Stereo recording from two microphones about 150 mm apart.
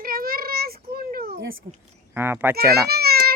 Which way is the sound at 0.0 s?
75° right (ahead or behind).